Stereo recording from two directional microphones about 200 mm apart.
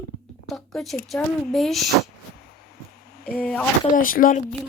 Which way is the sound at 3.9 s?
45° left (ahead or behind).